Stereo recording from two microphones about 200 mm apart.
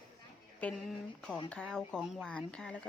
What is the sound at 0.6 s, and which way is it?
Speech, centre (ahead or behind).